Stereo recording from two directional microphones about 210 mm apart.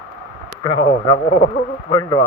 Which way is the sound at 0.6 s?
20° left (ahead or behind).